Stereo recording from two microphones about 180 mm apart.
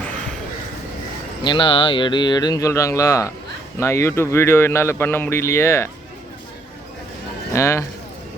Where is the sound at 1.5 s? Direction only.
30° left (ahead or behind).